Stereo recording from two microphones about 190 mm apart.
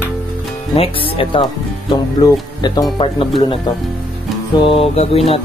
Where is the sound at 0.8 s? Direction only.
30° left (ahead or behind).